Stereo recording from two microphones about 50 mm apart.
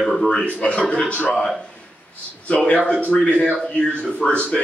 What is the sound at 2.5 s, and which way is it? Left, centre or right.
A man's voice, left.